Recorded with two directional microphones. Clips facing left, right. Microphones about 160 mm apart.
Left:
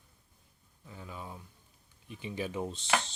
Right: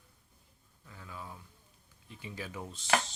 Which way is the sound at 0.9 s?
20° left (ahead or behind).